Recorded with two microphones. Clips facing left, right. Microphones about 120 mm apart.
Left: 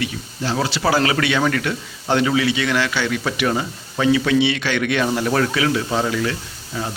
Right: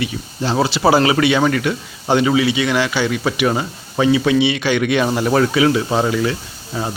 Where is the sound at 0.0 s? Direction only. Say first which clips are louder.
Right 3 dB; 20° right (ahead or behind).